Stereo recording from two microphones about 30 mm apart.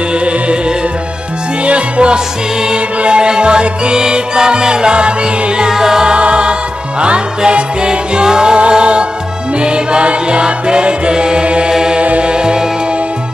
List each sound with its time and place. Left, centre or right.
1.7 s music: right
5.7 s music: centre
6.0 s music: right
11.4 s chant: right
11.7 s chant: right
12.2 s music: right